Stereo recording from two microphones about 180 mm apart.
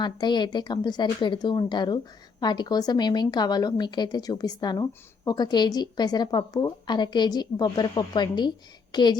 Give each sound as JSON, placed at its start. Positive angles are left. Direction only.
{"t": 0.0, "sound": "a woman's voice", "side_deg": 25}